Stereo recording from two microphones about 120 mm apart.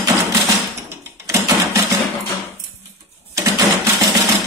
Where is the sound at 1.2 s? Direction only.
25° right (ahead or behind).